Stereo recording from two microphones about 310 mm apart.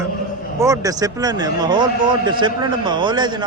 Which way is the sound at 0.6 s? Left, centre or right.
Centre.